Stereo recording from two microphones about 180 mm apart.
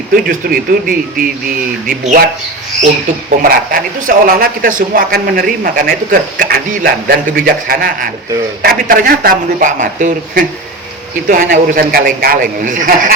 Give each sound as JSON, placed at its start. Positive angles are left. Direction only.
{"t": 0.3, "sound": "a man's voice", "side_deg": -50}
{"t": 3.4, "sound": "a man's voice", "side_deg": -55}